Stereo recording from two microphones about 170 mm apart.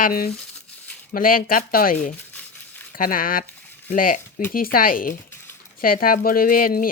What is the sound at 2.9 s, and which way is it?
Speech, 55° left (ahead or behind).